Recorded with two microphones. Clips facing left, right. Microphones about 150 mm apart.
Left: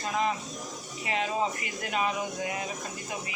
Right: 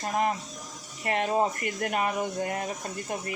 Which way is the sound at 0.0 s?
50° right (ahead or behind).